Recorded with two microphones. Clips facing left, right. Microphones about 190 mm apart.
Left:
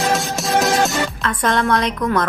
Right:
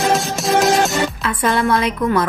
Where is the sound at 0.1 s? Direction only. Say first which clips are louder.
Right 2 dB; centre (ahead or behind).